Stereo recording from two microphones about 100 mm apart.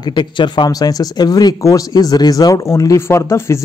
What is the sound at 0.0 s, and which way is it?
Speech, 50° left (ahead or behind).